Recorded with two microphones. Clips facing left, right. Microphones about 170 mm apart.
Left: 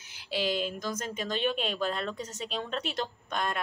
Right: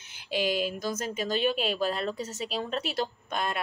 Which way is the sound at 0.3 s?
15° right (ahead or behind).